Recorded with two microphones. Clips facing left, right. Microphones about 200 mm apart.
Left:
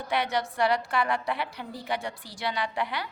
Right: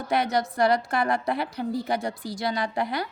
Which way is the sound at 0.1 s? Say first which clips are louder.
Right 4 dB; 40° right (ahead or behind).